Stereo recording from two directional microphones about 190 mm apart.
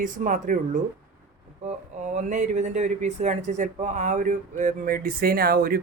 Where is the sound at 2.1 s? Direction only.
40° right (ahead or behind).